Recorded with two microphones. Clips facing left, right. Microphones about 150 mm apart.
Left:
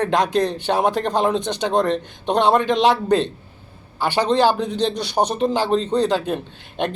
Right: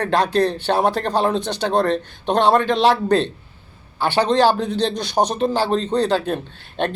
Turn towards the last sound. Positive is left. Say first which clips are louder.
# right 1 dB
turn(degrees=15)  # may be behind; listen again after turning